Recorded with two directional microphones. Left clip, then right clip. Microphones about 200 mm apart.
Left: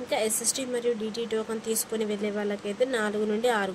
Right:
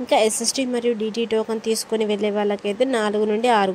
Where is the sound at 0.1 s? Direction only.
35° right (ahead or behind).